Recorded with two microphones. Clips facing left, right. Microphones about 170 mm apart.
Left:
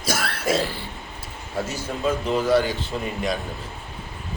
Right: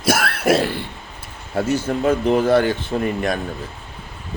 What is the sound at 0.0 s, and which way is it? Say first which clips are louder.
Throat clearing: right 7 dB; 65° right (ahead or behind).